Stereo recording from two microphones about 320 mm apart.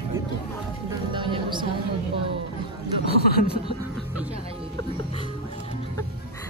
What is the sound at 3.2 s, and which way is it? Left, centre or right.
Speech, left.